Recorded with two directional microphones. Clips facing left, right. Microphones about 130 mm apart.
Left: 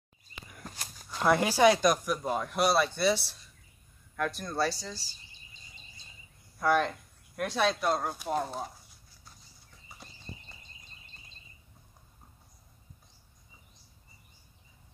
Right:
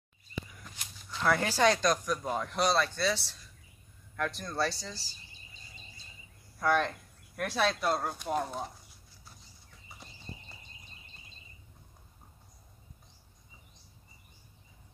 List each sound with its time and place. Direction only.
0.5 s walk: 45° left (ahead or behind)
1.2 s speech: 15° left (ahead or behind)
4.2 s speech: centre (ahead or behind)
6.6 s speech: 5° left (ahead or behind)